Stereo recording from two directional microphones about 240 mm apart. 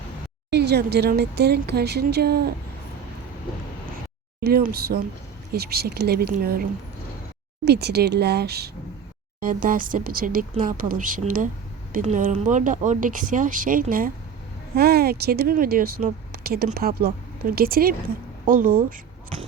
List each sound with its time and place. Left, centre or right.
0.5 s speech: right
4.4 s speech: right
7.6 s speech: right